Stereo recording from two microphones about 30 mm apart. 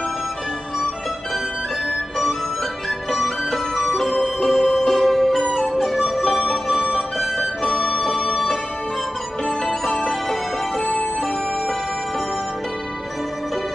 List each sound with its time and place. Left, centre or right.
3.1 s music: centre
6.5 s music: right
7.6 s music: left
8.0 s music: centre
10.8 s music: left